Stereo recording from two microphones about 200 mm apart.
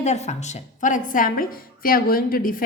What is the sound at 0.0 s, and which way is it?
A woman's voice, 35° left (ahead or behind).